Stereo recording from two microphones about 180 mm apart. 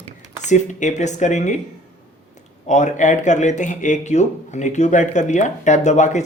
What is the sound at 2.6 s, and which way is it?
Speech, 40° left (ahead or behind).